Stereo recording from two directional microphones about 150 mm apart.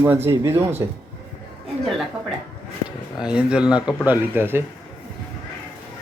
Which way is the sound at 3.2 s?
5° right (ahead or behind).